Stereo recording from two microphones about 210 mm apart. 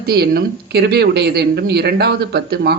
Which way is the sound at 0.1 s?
50° right (ahead or behind).